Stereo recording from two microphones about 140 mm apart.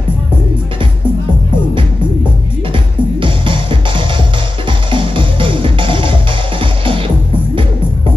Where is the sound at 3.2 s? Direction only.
35° right (ahead or behind).